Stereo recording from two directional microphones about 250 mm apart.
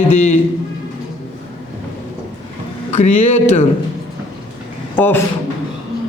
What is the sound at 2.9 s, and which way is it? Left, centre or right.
Speech, left.